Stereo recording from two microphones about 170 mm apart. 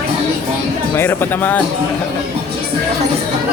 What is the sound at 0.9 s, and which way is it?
Speech, 10° left (ahead or behind).